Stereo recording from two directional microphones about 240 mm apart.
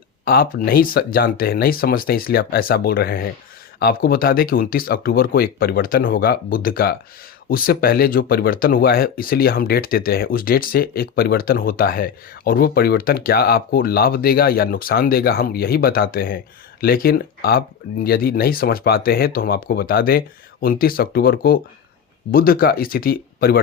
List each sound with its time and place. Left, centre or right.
0.3 s speech: left